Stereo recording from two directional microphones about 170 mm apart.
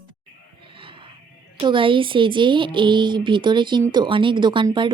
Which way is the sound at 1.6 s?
30° right (ahead or behind).